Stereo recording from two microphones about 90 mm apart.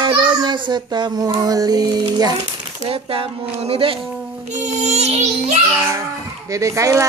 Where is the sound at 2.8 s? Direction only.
90° right.